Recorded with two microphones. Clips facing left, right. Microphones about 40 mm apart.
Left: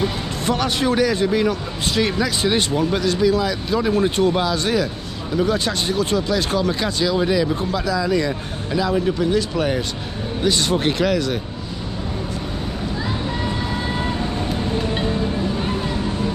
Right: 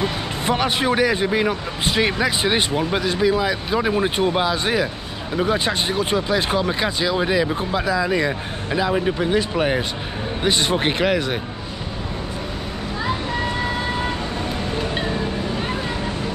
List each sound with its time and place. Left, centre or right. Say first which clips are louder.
0.0 s speech: even; right